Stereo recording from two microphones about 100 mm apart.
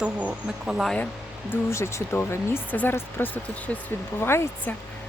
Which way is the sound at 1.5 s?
30° left (ahead or behind).